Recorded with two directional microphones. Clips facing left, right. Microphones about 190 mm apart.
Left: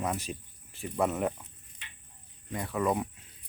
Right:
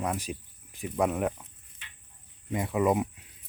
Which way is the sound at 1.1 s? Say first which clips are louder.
Right 1 dB; centre (ahead or behind).